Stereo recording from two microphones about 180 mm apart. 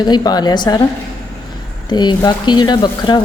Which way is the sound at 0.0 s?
25° left (ahead or behind).